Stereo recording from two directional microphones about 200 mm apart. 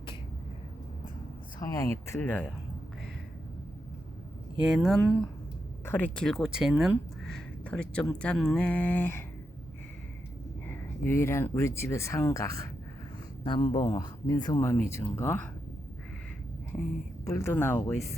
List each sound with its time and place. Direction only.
1.5 s speech: 15° left (ahead or behind)
4.6 s speech: centre (ahead or behind)
5.8 s speech: 10° left (ahead or behind)
10.7 s speech: 10° left (ahead or behind)
17.2 s speech: 15° left (ahead or behind)